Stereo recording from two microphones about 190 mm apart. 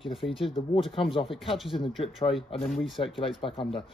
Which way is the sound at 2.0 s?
30° left (ahead or behind).